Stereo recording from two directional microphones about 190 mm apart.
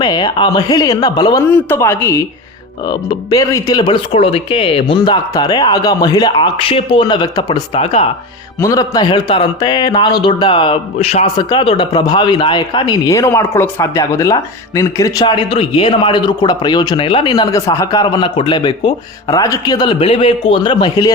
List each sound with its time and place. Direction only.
0.0 s a man's voice: 20° left (ahead or behind)
8.6 s a man's voice: 20° left (ahead or behind)